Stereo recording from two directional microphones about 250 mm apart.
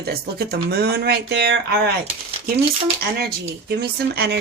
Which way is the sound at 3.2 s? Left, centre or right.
Right.